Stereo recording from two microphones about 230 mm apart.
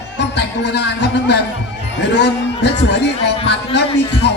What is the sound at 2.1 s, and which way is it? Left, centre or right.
A man's voice, left.